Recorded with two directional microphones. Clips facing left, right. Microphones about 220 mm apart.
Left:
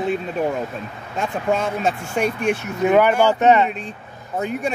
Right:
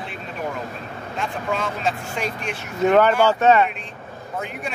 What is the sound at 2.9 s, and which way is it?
Speech, 15° left (ahead or behind).